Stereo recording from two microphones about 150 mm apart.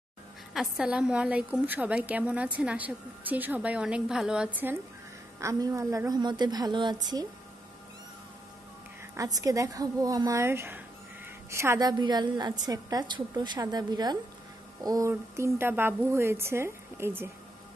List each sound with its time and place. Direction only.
0.5 s a woman's voice: centre (ahead or behind)
5.4 s a woman's voice: 20° right (ahead or behind)
9.1 s a woman's voice: 20° right (ahead or behind)